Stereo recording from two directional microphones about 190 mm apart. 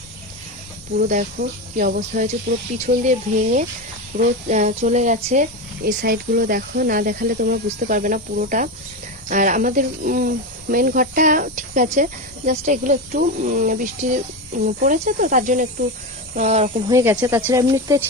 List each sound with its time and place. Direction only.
0.9 s speech: 50° right (ahead or behind)
2.0 s speech: 35° right (ahead or behind)
16.9 s speech: 15° right (ahead or behind)